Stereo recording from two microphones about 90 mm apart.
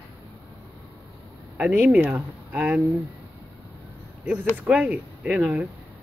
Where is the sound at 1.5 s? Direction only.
20° right (ahead or behind).